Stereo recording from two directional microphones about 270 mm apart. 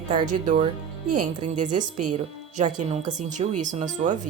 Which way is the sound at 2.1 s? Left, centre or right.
Right.